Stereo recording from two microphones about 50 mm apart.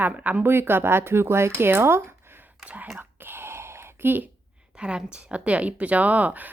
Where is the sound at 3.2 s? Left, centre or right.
Right.